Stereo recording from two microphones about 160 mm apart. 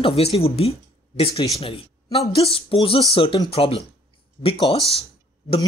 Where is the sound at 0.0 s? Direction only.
35° left (ahead or behind).